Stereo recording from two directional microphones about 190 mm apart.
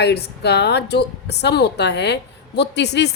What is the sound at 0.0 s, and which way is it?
A woman's voice, 60° left (ahead or behind).